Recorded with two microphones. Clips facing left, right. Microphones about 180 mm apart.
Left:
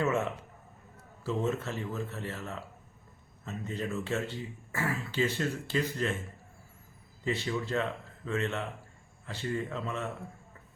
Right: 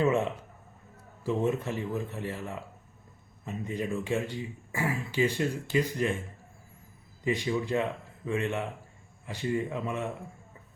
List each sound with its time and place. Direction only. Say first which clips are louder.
0.0 s a sound: right 4 dB; 15° right (ahead or behind)
1.2 s speech: right 3 dB; 15° right (ahead or behind)
7.3 s speech: right 4 dB; 15° right (ahead or behind)